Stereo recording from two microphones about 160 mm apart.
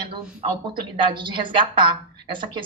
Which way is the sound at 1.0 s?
30° right (ahead or behind).